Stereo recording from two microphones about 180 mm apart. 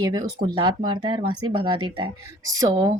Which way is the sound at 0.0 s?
20° right (ahead or behind).